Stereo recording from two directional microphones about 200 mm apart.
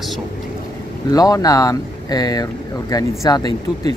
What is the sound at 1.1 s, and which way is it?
Speech, 20° left (ahead or behind).